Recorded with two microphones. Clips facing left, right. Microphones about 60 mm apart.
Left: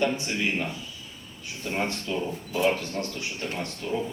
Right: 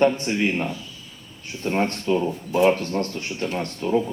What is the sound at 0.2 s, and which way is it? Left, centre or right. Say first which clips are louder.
Speech: right 5 dB; right.